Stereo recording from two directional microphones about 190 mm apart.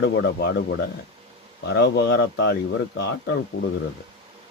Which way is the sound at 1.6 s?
60° left (ahead or behind).